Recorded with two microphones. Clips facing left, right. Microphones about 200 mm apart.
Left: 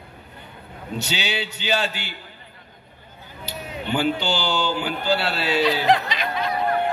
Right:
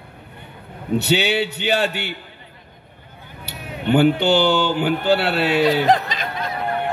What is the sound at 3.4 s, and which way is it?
Speech, 60° right (ahead or behind).